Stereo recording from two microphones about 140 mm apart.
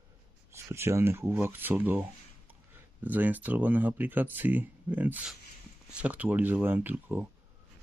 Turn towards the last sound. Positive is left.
turn(degrees=-15)  # may be behind; listen again after turning